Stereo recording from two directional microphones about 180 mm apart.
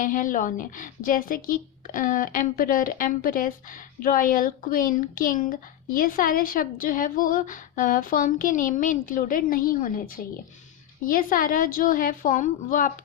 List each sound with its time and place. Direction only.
0.0 s a woman's voice: 50° left (ahead or behind)
11.0 s a woman's voice: 50° left (ahead or behind)